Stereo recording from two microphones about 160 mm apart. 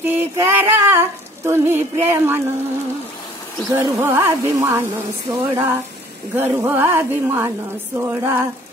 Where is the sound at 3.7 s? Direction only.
15° right (ahead or behind).